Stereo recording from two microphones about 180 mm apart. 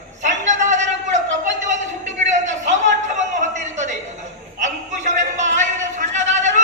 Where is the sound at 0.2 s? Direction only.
40° right (ahead or behind).